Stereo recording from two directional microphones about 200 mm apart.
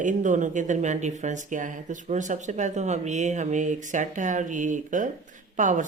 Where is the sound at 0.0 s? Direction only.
40° right (ahead or behind).